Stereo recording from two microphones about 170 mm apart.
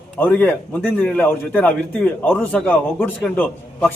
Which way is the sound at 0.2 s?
10° left (ahead or behind).